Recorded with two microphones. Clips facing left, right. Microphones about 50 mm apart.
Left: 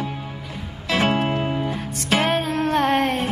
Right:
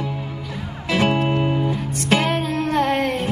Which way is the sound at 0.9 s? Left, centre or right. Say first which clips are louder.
Right 1 dB; left.